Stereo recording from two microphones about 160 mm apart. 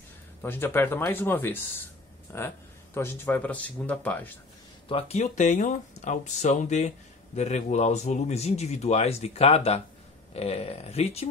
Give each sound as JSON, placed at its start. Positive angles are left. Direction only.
{"t": 0.4, "sound": "speech", "side_deg": 15}
{"t": 4.8, "sound": "speech", "side_deg": 35}